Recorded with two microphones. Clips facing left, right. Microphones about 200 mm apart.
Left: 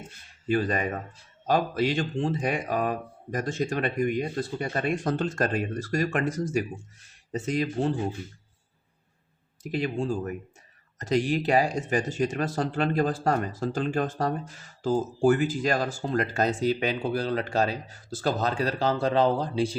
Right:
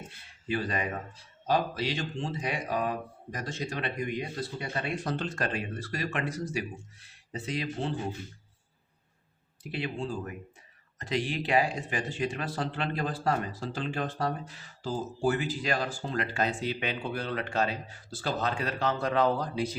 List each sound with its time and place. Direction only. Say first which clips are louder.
0.4 s speech: left 6 dB; 45° left (ahead or behind)
9.6 s speech: left 6 dB; 45° left (ahead or behind)